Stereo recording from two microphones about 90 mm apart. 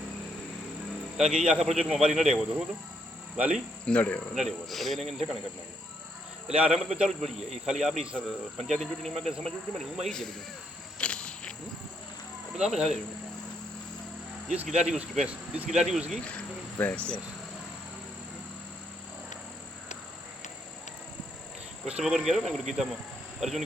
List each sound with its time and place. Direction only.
1.1 s speech: 5° right (ahead or behind)
3.8 s speech: 15° left (ahead or behind)
4.4 s speech: centre (ahead or behind)
6.5 s speech: 10° right (ahead or behind)
10.9 s a sound: 10° left (ahead or behind)
12.5 s speech: 5° right (ahead or behind)
14.5 s speech: 15° right (ahead or behind)
16.7 s speech: 15° left (ahead or behind)
21.8 s speech: 5° right (ahead or behind)